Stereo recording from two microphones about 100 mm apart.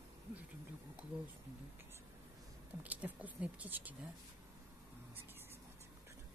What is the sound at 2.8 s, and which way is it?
Speech, 15° right (ahead or behind).